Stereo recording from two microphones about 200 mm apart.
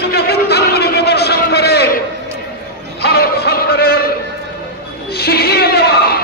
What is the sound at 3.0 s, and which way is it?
Music, 50° left (ahead or behind).